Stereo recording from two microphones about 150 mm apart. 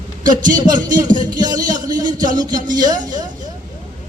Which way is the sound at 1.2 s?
25° right (ahead or behind).